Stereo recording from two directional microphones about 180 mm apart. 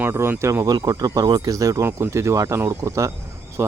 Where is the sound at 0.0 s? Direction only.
15° right (ahead or behind).